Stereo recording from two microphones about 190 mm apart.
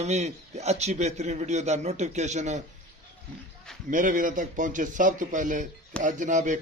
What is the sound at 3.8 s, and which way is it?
A man's voice, 45° right (ahead or behind).